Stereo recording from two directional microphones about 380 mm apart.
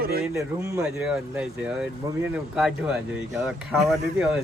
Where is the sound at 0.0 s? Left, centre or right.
Right.